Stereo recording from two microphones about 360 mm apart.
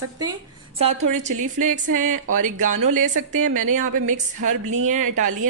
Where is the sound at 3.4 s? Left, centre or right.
Right.